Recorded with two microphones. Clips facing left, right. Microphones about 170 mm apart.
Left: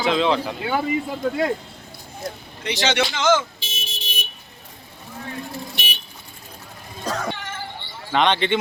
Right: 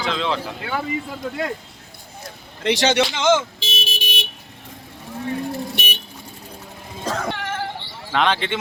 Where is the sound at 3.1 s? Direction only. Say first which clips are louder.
Left 1 dB; 25° right (ahead or behind).